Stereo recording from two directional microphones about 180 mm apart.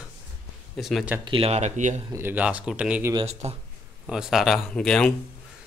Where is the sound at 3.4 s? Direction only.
35° right (ahead or behind).